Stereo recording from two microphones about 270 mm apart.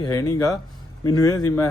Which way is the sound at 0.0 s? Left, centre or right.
Centre.